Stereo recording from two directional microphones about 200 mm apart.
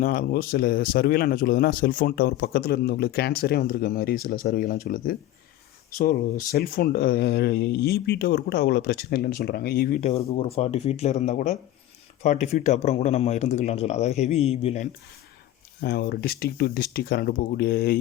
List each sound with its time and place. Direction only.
0.0 s a man's voice: 45° left (ahead or behind)
6.4 s a man's voice: 45° left (ahead or behind)
10.0 s speech: 30° left (ahead or behind)
15.8 s a man's voice: 55° left (ahead or behind)